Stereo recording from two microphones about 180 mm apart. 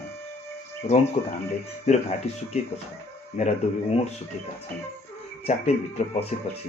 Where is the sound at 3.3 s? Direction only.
40° left (ahead or behind).